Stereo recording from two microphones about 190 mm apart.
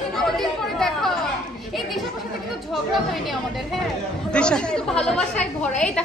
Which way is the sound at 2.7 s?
Centre (ahead or behind).